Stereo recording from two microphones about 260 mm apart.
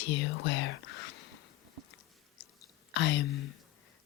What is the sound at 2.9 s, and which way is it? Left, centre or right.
Speech, left.